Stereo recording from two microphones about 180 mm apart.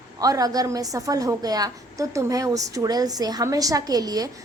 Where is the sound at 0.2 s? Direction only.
20° right (ahead or behind).